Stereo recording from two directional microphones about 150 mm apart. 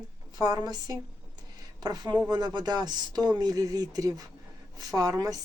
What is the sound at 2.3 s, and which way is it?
Speech, 30° right (ahead or behind).